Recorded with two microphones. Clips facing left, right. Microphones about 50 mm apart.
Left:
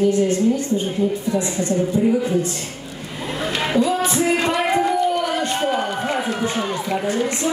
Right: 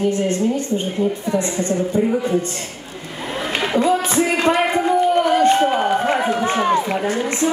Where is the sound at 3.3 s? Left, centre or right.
Right.